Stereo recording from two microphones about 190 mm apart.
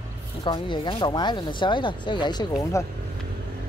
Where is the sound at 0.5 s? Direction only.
25° left (ahead or behind).